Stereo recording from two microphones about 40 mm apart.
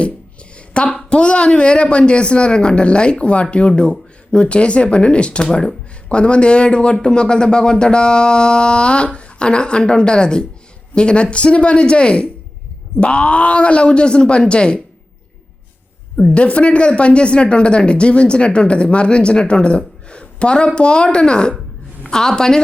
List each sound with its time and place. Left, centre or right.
0.5 s a sound: left
1.1 s speech: left
16.3 s a woman's voice: left